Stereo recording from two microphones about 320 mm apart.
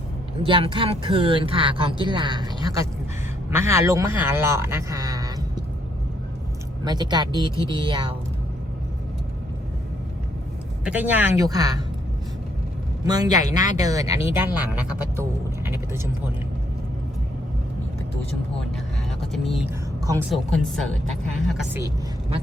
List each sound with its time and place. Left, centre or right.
0.4 s speech: centre
6.8 s speech: centre
10.8 s speech: centre
13.1 s speech: centre
20.1 s speech: centre